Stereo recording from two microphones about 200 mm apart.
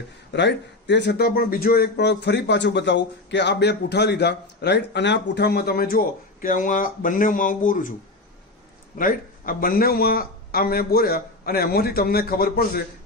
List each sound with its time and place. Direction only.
0.3 s speech: 60° left (ahead or behind); by 7.9 s 40° left (ahead or behind)
9.0 s a man's voice: 45° left (ahead or behind)